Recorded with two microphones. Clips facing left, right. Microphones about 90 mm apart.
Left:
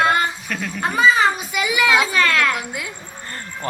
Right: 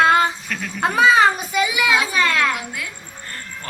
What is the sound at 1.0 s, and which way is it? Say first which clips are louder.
Speech: right 2 dB; 75° right (ahead or behind).